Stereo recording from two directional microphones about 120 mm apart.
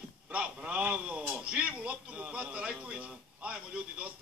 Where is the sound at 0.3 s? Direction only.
10° right (ahead or behind).